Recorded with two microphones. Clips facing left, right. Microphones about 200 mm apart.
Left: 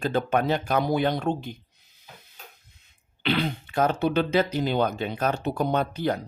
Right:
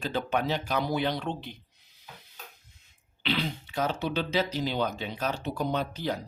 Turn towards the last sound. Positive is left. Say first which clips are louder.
# left 5 dB
turn(degrees=55)  # may be behind; listen again after turning